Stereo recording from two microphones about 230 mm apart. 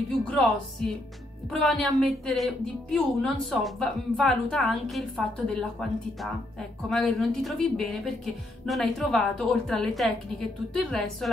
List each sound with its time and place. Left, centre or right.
0.3 s a woman's voice: centre